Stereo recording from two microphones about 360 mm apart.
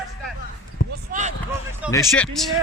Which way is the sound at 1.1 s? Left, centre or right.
Right.